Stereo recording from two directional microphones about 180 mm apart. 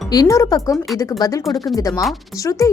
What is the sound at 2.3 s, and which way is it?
Speech, 20° left (ahead or behind).